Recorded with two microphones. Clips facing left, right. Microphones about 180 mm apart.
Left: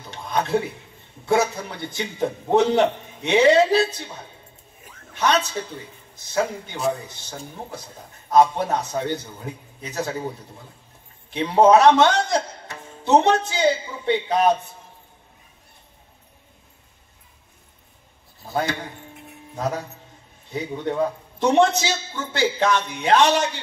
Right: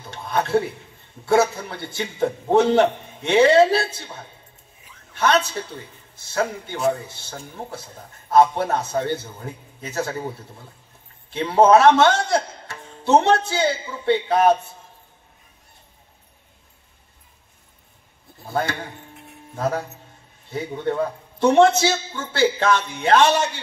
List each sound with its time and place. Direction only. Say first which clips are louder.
0.1 s a sound: right 2 dB; 15° left (ahead or behind)
1.2 s a man's voice: right 2 dB; 15° left (ahead or behind)
5.1 s a woman's voice: right 1 dB; 15° left (ahead or behind)
11.2 s a man's voice: even; 15° left (ahead or behind)
19.5 s a man's voice: right 2 dB; 15° left (ahead or behind)